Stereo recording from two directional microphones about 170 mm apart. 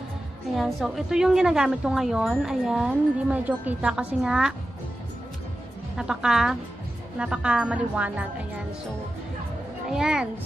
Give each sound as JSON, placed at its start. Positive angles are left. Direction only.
{"t": 0.6, "sound": "a woman's voice", "side_deg": 0}
{"t": 5.9, "sound": "a woman's voice", "side_deg": -5}
{"t": 9.8, "sound": "a woman's voice", "side_deg": -5}